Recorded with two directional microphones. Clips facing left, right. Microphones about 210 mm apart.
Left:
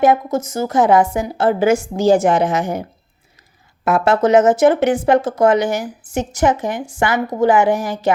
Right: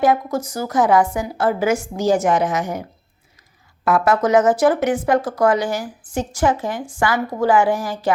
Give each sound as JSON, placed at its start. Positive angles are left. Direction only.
{"t": 0.0, "sound": "speech", "side_deg": 20}
{"t": 3.8, "sound": "speech", "side_deg": 25}